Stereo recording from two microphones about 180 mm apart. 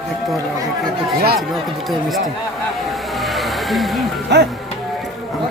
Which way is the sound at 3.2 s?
Centre (ahead or behind).